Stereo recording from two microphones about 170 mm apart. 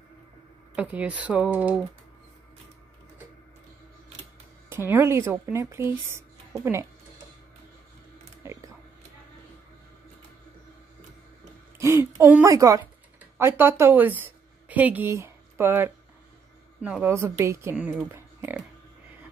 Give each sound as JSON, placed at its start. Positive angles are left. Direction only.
{"t": 0.7, "sound": "speech", "side_deg": -10}
{"t": 4.6, "sound": "speech", "side_deg": -15}
{"t": 8.5, "sound": "a sound", "side_deg": -20}
{"t": 11.8, "sound": "a woman's voice", "side_deg": -15}
{"t": 17.7, "sound": "speech", "side_deg": -5}
{"t": 18.1, "sound": "music", "side_deg": -15}